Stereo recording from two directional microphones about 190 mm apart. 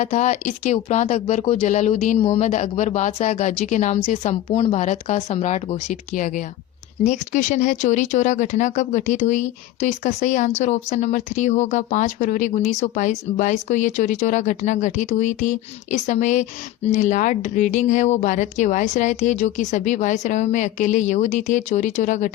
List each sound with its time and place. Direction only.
0.0 s speech: 40° left (ahead or behind)